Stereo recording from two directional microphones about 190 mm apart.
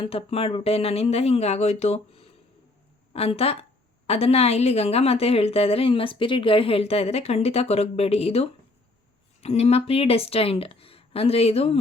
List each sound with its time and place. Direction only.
0.0 s a woman's voice: 30° left (ahead or behind)